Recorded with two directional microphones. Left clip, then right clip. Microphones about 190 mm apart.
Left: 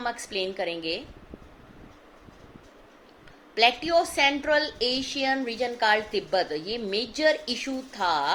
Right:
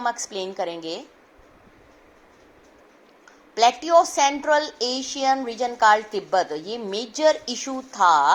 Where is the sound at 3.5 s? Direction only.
20° right (ahead or behind).